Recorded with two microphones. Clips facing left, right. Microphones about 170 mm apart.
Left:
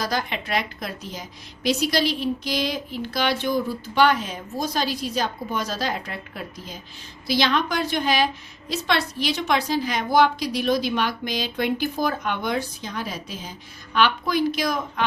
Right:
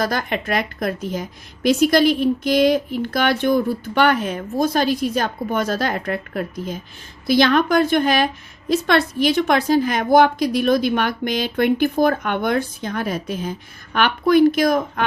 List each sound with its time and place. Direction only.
0.0 s a woman's voice: 50° right (ahead or behind)